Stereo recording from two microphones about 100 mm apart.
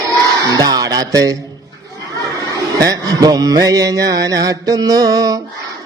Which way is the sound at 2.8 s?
40° right (ahead or behind).